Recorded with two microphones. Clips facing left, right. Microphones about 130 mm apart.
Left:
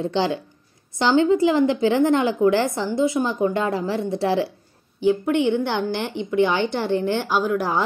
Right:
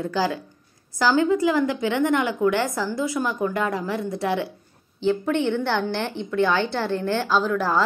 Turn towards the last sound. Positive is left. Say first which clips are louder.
# even
turn(degrees=15)  # may be behind; listen again after turning